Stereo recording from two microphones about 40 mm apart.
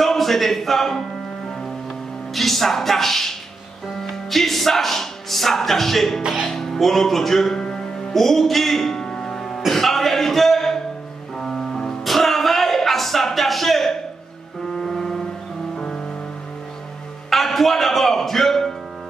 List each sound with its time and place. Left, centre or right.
0.0 s speech: centre
2.3 s speech: centre
6.5 s music: centre
7.6 s music: centre
8.1 s music: centre
9.0 s music: left
9.7 s a sound: centre
11.3 s music: centre
14.7 s foghorn: centre
15.7 s music: centre
17.3 s music: centre